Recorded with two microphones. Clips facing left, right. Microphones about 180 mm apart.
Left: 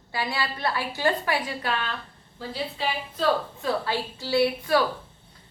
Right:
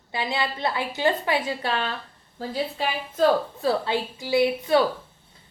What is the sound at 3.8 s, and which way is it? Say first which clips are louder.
Speech: right 2 dB; 20° right (ahead or behind).